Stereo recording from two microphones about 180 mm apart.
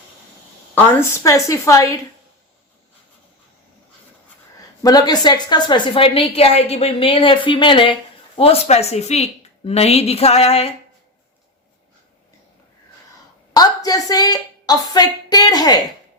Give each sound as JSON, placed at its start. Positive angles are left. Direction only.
{"t": 0.9, "sound": "a woman's voice", "side_deg": 15}
{"t": 4.8, "sound": "a woman's voice", "side_deg": 20}
{"t": 13.5, "sound": "a woman's voice", "side_deg": 20}